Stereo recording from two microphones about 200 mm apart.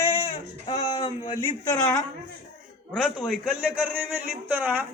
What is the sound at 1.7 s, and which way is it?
A man's voice, 5° left (ahead or behind).